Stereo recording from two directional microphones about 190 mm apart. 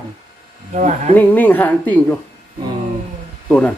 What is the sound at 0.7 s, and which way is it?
Speech, 40° right (ahead or behind).